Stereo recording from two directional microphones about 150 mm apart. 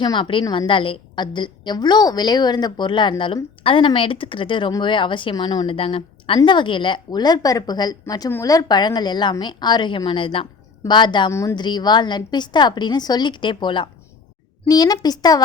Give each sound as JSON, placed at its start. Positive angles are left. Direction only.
{"t": 0.0, "sound": "a woman's voice", "side_deg": 30}
{"t": 11.3, "sound": "a woman's voice", "side_deg": 20}
{"t": 11.5, "sound": "a woman's voice", "side_deg": 30}